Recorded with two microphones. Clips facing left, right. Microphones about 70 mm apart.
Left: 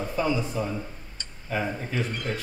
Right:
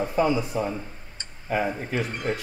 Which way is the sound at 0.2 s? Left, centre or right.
Centre.